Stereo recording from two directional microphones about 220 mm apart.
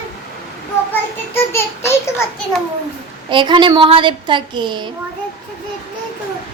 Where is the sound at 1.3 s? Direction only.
10° left (ahead or behind).